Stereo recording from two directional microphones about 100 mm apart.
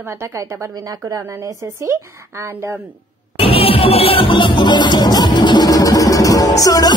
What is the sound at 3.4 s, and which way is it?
Music, 70° left (ahead or behind).